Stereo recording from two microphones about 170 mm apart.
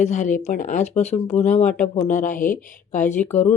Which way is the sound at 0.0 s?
45° left (ahead or behind).